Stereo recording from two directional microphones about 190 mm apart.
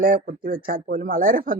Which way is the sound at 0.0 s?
55° right (ahead or behind).